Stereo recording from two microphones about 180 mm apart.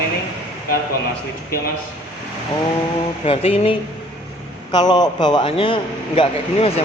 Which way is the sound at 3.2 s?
35° left (ahead or behind).